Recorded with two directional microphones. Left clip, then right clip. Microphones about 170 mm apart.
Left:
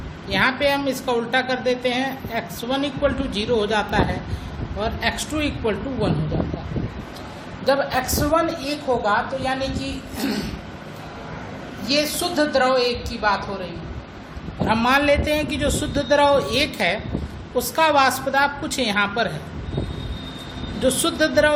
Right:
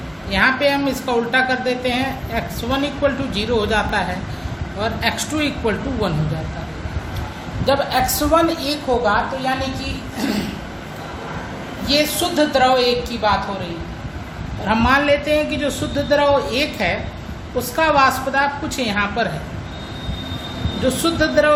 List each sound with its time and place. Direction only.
0.3 s a woman's voice: 20° left (ahead or behind)
7.7 s a woman's voice: 20° left (ahead or behind)
8.3 s a woman's voice: 5° left (ahead or behind)
10.2 s a woman's voice: 25° left (ahead or behind)
11.9 s a woman's voice: 20° left (ahead or behind)
14.7 s a woman's voice: 25° left (ahead or behind)
20.8 s a woman's voice: 25° left (ahead or behind)